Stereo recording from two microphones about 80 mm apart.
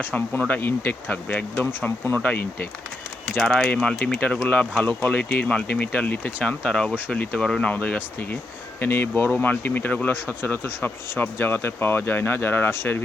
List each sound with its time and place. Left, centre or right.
0.0 s speech: left
3.3 s speech: centre
7.6 s speech: centre